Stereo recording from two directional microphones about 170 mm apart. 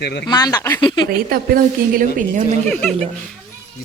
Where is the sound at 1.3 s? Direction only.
60° right (ahead or behind).